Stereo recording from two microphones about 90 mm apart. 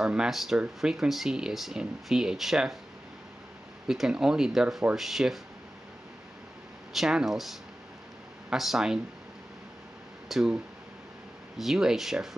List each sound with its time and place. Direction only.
0.0 s speech: 5° right (ahead or behind)
3.8 s speech: 5° right (ahead or behind)
6.9 s speech: 5° right (ahead or behind)
10.2 s speech: 5° right (ahead or behind)